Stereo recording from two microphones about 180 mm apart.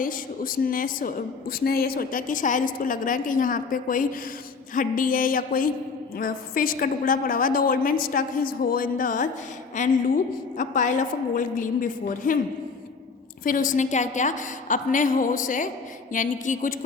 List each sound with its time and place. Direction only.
0.0 s a woman's voice: 50° left (ahead or behind)
13.4 s a woman's voice: 50° left (ahead or behind)